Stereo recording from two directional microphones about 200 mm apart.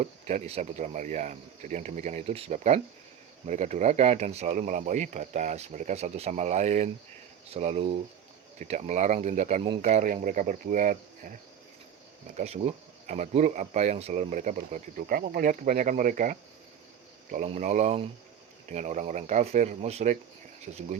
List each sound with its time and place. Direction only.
0.0 s speech: 35° right (ahead or behind)
12.4 s speech: 35° right (ahead or behind)